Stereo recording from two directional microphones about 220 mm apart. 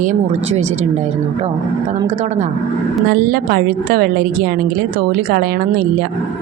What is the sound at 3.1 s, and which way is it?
A woman's voice, 40° right (ahead or behind).